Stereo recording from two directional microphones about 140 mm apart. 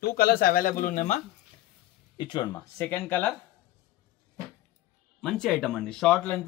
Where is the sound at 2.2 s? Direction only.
30° left (ahead or behind).